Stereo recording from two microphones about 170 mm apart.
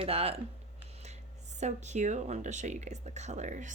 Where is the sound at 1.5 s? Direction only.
40° right (ahead or behind).